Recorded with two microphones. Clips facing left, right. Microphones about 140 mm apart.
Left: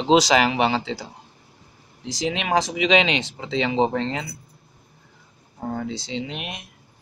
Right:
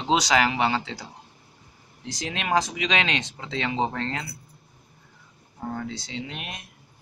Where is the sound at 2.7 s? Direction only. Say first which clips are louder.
Left 7 dB; 20° left (ahead or behind).